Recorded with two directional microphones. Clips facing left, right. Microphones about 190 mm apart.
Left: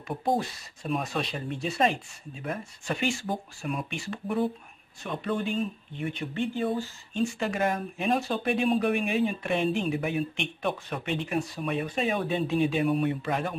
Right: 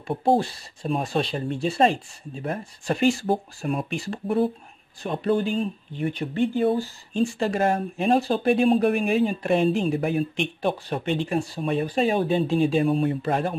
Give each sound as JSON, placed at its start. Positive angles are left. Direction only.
{"t": 0.1, "sound": "speech", "side_deg": -30}